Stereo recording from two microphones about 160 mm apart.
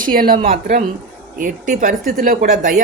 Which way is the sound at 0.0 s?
65° right (ahead or behind).